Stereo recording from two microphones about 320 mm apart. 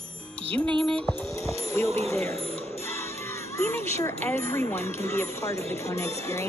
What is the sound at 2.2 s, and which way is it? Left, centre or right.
Speech, centre.